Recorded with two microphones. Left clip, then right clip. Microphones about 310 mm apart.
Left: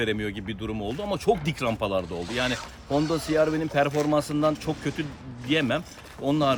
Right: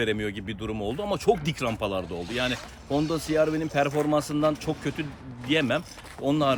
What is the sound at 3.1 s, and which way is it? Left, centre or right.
Speech, centre.